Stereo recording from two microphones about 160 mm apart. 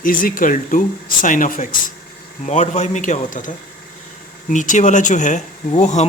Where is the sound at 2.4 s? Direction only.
45° left (ahead or behind).